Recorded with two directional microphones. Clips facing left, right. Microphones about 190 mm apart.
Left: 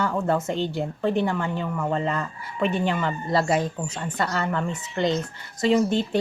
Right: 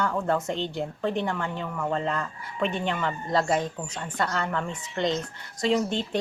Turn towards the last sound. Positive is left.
turn(degrees=5)  # may be behind; listen again after turning